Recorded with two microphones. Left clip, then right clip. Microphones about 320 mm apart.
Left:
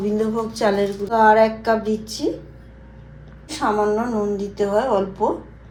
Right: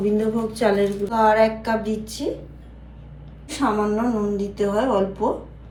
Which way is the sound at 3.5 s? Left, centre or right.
Left.